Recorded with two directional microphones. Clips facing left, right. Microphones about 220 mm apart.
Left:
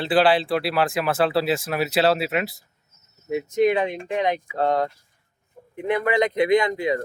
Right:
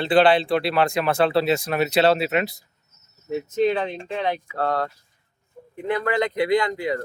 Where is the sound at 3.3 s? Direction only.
10° left (ahead or behind).